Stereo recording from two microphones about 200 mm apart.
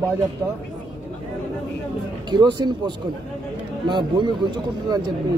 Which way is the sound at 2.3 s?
20° right (ahead or behind).